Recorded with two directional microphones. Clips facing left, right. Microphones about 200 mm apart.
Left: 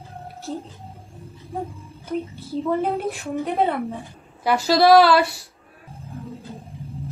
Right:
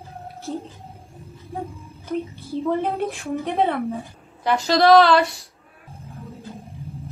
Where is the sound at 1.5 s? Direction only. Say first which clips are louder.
Left 1 dB; centre (ahead or behind).